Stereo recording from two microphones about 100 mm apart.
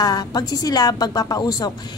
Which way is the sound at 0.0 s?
40° left (ahead or behind).